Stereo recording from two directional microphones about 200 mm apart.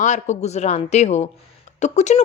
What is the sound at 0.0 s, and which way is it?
A man's voice, 35° left (ahead or behind).